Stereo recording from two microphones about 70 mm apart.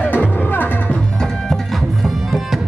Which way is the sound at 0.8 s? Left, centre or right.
Centre.